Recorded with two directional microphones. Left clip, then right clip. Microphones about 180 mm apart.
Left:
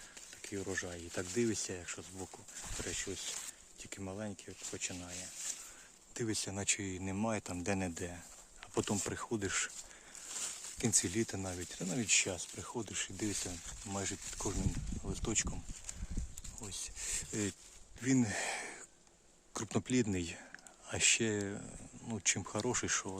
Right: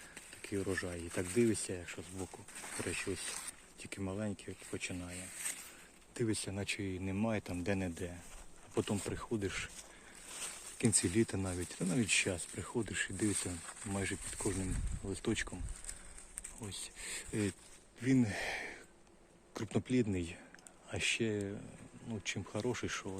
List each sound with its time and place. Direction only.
0.4 s speech: 5° left (ahead or behind)
2.8 s speech: centre (ahead or behind)
6.1 s speech: 15° left (ahead or behind)
10.8 s speech: 5° left (ahead or behind)
16.6 s speech: 10° left (ahead or behind)
18.0 s a sound: 20° left (ahead or behind)
19.5 s speech: 25° left (ahead or behind)